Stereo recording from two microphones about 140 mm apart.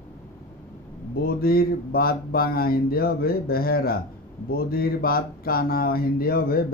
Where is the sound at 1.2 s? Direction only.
90° left.